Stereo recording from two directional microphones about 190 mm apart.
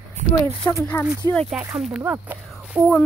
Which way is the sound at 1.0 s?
15° right (ahead or behind).